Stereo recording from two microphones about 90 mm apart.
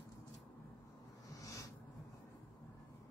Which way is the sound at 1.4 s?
40° left (ahead or behind).